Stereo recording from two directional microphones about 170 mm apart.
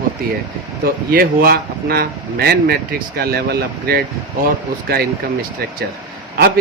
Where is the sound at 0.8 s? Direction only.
60° right (ahead or behind).